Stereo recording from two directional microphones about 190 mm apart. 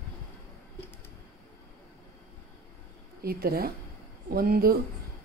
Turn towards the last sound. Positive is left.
turn(degrees=-50)  # may be behind; listen again after turning